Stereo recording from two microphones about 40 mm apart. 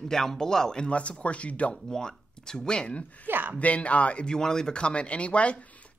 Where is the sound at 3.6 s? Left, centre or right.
Left.